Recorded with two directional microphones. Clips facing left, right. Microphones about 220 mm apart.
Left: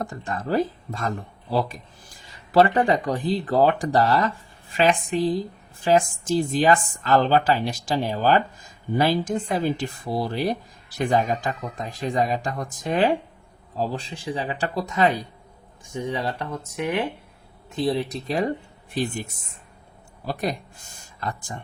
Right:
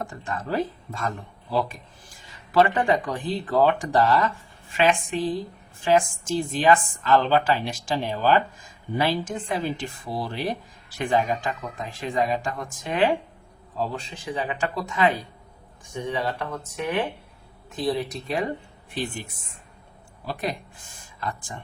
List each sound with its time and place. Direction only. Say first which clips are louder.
0.0 s speech: left 2 dB; 40° left (ahead or behind)
16.0 s speech: left 1 dB; 30° left (ahead or behind)
17.7 s speech: left 2 dB; 30° left (ahead or behind)